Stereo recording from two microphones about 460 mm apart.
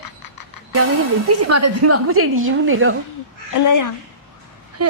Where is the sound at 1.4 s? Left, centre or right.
Right.